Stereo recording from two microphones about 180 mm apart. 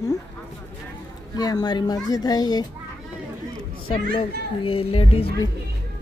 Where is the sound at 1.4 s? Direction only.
20° left (ahead or behind).